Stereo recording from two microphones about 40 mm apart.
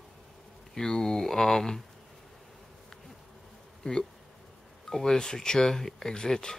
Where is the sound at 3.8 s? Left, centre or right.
Left.